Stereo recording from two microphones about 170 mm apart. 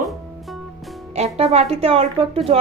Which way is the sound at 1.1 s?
40° right (ahead or behind).